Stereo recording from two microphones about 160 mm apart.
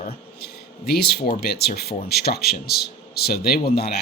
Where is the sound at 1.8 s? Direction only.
80° left.